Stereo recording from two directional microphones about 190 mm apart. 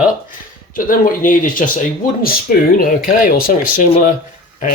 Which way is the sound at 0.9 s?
45° left (ahead or behind).